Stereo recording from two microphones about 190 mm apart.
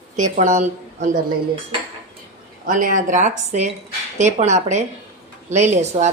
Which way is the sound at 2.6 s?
45° right (ahead or behind).